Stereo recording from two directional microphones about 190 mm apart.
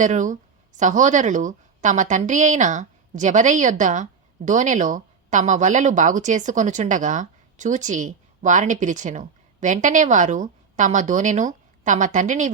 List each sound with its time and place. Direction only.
0.0 s a woman's voice: 40° right (ahead or behind)